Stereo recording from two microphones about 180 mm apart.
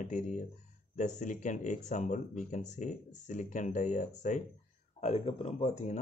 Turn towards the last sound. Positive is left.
turn(degrees=40)  # may be behind; listen again after turning